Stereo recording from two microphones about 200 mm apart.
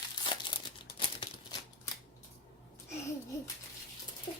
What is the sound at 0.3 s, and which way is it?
Crumpling, 25° left (ahead or behind).